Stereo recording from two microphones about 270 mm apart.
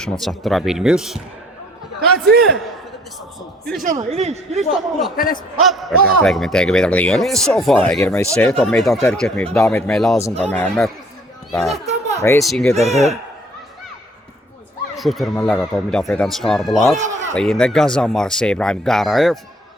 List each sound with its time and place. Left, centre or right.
0.0 s a man's voice: centre
2.4 s a man's voice: centre
3.8 s speech: right
4.5 s a man's voice: centre
5.1 s a man's voice: left
5.5 s a man's voice: centre
11.9 s a sound: right
12.2 s a man's voice: centre
12.7 s speech: right
14.9 s a man's voice: centre